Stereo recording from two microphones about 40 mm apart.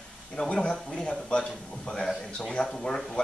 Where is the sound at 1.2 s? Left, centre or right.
Left.